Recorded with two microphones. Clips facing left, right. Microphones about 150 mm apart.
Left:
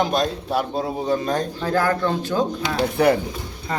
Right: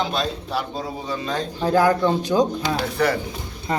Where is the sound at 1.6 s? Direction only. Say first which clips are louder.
Right 6 dB; 15° right (ahead or behind).